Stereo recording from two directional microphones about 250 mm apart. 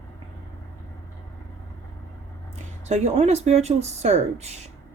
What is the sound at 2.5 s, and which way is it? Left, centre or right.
A woman's voice, right.